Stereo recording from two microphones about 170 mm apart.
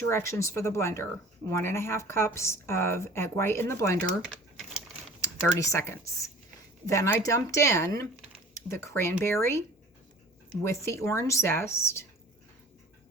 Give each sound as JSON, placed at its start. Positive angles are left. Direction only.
{"t": 0.1, "sound": "speech", "side_deg": 15}
{"t": 4.3, "sound": "typing", "side_deg": 0}
{"t": 5.2, "sound": "speech", "side_deg": 20}